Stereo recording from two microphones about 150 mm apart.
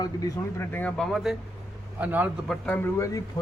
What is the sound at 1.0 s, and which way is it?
Speech, centre (ahead or behind).